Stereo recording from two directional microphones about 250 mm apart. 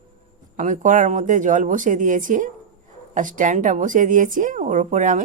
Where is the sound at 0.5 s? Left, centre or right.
Right.